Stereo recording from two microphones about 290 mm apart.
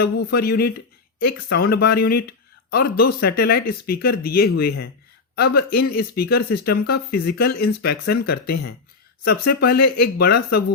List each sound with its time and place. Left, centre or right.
0.0 s speech: left